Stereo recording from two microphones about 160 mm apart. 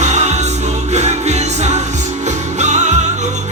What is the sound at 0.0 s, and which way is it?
Music, 45° right (ahead or behind).